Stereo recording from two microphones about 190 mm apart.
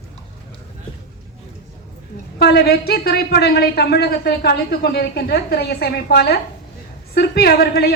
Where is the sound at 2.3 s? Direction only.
55° left (ahead or behind).